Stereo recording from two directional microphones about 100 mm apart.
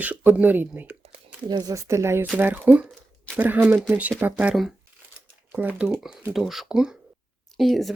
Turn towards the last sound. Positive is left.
turn(degrees=0)  # may be behind; listen again after turning